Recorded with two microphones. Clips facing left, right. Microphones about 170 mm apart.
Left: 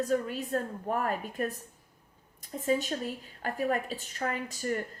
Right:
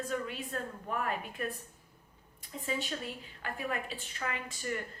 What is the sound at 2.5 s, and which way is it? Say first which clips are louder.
A woman's voice: left 7 dB; 45° left (ahead or behind).